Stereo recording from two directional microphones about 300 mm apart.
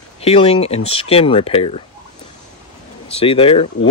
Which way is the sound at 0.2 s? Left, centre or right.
Centre.